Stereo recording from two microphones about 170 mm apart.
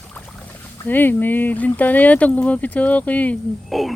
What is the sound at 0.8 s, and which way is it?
Speech, 10° left (ahead or behind).